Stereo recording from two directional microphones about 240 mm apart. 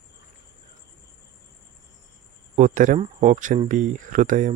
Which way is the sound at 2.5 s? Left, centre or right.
Right.